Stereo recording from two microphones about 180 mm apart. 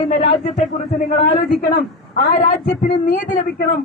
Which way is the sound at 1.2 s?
60° left (ahead or behind).